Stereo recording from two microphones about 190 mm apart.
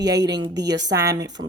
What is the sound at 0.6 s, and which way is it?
Speech, 65° right (ahead or behind).